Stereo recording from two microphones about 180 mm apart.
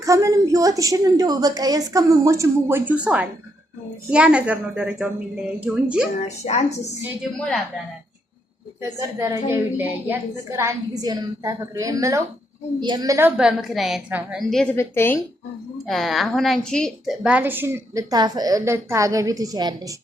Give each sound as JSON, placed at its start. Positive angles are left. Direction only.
{"t": 0.0, "sound": "a woman's voice", "side_deg": -20}
{"t": 6.2, "sound": "a woman's voice", "side_deg": 40}
{"t": 7.3, "sound": "speech", "side_deg": 0}
{"t": 8.8, "sound": "a woman's voice", "side_deg": -15}
{"t": 14.5, "sound": "a woman's voice", "side_deg": 5}
{"t": 15.9, "sound": "speech", "side_deg": 0}
{"t": 17.2, "sound": "a woman's voice", "side_deg": -10}